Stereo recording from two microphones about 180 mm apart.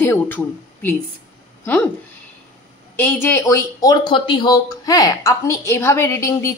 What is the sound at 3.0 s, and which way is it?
Speech, 10° left (ahead or behind).